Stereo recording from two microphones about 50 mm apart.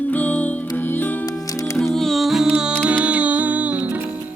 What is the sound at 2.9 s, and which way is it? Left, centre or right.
Music, right.